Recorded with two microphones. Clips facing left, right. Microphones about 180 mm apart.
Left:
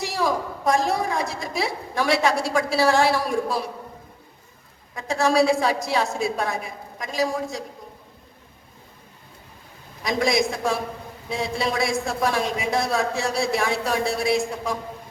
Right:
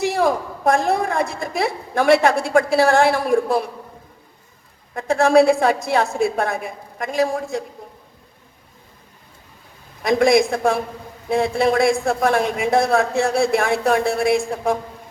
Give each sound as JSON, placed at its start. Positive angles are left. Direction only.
{"t": 0.0, "sound": "a woman's voice", "side_deg": -55}
{"t": 4.9, "sound": "a woman's voice", "side_deg": -55}
{"t": 10.0, "sound": "a woman's voice", "side_deg": -55}